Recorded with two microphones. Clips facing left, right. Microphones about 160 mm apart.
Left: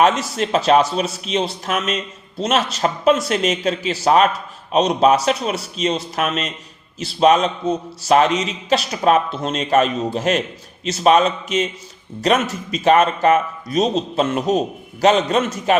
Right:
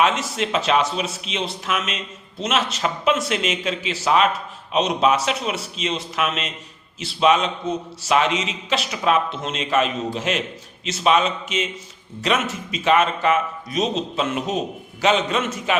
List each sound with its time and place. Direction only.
0.0 s a man's voice: 40° left (ahead or behind)